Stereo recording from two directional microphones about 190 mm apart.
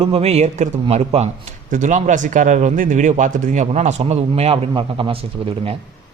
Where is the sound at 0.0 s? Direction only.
30° right (ahead or behind).